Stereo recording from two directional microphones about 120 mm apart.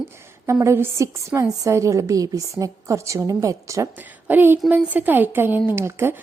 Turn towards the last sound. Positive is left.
turn(degrees=-20)  # may be behind; listen again after turning